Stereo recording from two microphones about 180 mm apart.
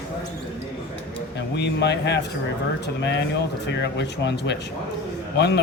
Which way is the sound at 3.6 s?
70° left (ahead or behind).